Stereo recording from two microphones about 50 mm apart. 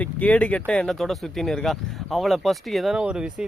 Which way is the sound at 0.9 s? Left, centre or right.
Centre.